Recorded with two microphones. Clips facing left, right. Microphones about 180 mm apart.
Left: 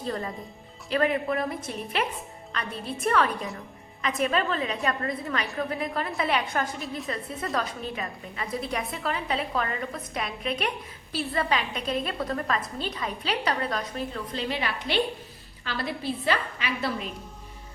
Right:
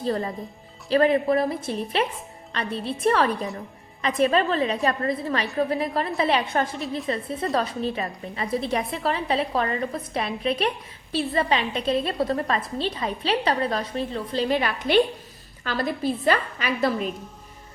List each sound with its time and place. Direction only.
0.9 s a woman's voice: 30° right (ahead or behind)
14.5 s a woman's voice: 50° right (ahead or behind)